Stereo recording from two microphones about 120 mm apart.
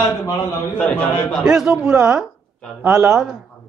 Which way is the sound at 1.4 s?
5° right (ahead or behind).